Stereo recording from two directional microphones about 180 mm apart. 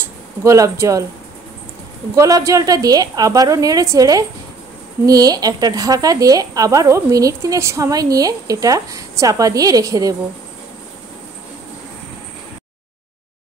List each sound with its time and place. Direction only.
0.0 s speech: 15° right (ahead or behind)
2.1 s speech: 15° right (ahead or behind)